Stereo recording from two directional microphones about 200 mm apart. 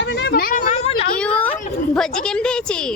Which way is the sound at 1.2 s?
5° left (ahead or behind).